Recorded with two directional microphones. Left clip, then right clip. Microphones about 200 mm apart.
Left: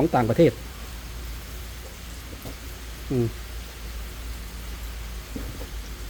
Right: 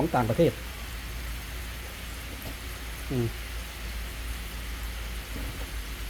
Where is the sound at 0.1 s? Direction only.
35° left (ahead or behind).